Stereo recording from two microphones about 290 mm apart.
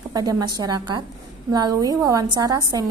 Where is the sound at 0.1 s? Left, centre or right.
Centre.